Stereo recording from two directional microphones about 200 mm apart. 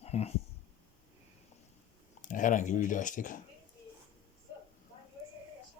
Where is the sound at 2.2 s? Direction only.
40° left (ahead or behind).